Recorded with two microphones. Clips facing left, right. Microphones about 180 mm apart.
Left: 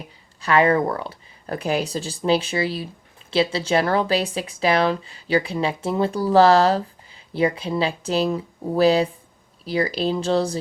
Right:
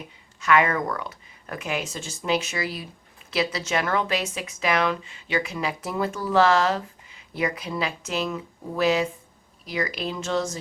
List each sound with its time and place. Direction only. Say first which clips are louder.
0.4 s speech: left 4 dB; 30° left (ahead or behind)